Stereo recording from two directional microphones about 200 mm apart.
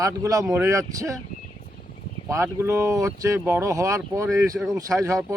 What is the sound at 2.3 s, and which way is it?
Speech, 15° right (ahead or behind).